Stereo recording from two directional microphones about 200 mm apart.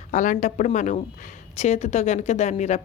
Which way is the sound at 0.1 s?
40° left (ahead or behind).